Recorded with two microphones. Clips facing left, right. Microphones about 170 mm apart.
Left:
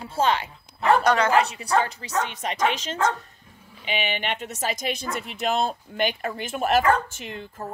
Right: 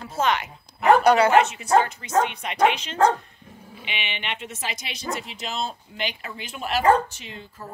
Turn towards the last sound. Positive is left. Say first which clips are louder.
# left 5 dB
turn(degrees=50)  # may be behind; listen again after turning